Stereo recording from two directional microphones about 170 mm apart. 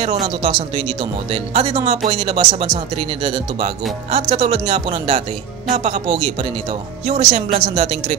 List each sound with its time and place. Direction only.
0.4 s speech: 30° right (ahead or behind)